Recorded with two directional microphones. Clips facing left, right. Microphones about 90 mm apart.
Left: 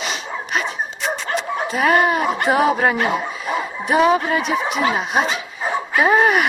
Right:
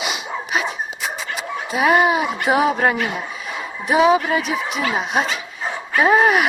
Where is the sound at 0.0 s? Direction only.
5° right (ahead or behind).